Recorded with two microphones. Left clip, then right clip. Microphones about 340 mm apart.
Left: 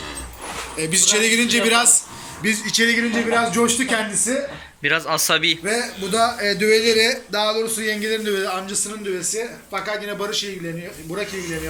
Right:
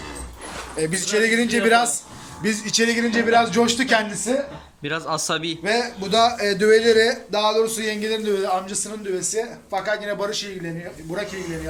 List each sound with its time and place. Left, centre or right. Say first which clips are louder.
0.8 s speech: left 2 dB; right
4.8 s a man's voice: left 5 dB; centre
5.6 s speech: right 1 dB; right